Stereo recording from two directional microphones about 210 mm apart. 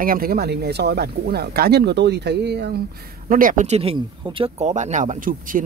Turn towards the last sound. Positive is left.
turn(degrees=-40)  # may be behind; listen again after turning